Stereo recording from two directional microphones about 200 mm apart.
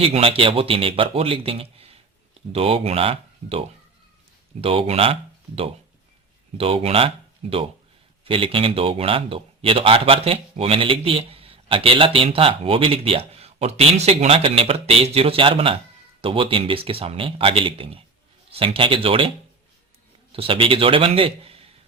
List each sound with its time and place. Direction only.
0.0 s speech: 30° right (ahead or behind)
4.6 s speech: 30° right (ahead or behind)
6.6 s speech: 30° right (ahead or behind)
20.3 s speech: 25° right (ahead or behind)